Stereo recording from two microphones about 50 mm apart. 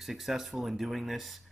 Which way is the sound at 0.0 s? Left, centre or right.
Centre.